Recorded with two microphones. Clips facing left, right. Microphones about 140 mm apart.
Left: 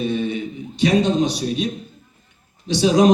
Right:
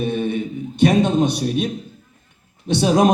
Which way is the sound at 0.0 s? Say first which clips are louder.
Right 1 dB; 55° right (ahead or behind).